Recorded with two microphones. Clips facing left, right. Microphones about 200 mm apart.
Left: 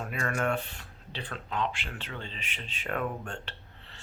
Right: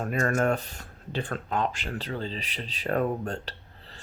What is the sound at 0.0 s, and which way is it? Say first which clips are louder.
A man's voice: right 6 dB; 40° right (ahead or behind).